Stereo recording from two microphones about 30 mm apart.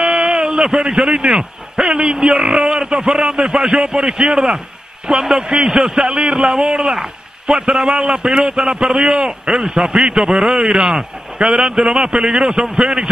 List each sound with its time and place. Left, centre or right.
0.1 s a sound: right
0.9 s a man's voice: right
5.5 s a man's voice: right